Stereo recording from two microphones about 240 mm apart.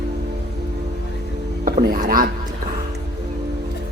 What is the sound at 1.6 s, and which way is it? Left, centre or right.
Music, right.